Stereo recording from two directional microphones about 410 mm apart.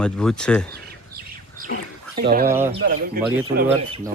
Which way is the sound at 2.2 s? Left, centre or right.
Right.